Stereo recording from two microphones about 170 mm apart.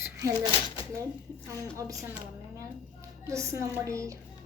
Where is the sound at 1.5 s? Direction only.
20° right (ahead or behind).